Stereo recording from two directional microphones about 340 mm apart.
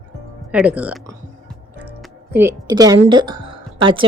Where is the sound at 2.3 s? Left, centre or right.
Centre.